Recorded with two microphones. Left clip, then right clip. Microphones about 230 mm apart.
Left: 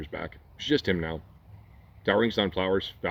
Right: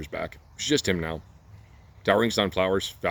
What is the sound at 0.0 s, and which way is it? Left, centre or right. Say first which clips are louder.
Speech: right 4 dB; right.